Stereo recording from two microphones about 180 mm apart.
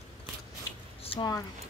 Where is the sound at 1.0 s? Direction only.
30° left (ahead or behind).